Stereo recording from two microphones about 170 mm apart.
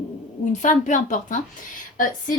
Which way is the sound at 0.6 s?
45° left (ahead or behind).